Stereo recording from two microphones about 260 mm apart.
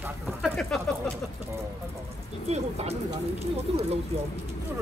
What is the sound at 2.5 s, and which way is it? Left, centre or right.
Speech, right.